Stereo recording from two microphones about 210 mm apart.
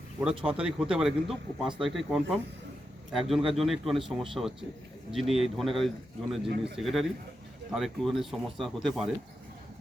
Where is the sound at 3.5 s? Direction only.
Centre (ahead or behind).